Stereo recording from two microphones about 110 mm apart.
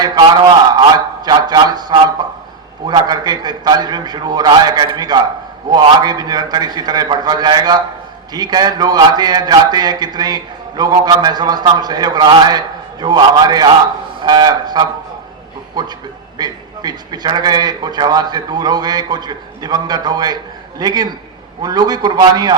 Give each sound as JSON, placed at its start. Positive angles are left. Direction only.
{"t": 0.0, "sound": "a man's voice", "side_deg": -40}